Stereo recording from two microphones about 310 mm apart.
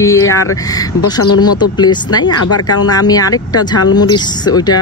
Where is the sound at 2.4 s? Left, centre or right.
Left.